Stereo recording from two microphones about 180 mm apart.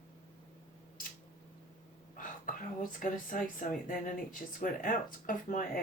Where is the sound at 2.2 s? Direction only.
50° left (ahead or behind).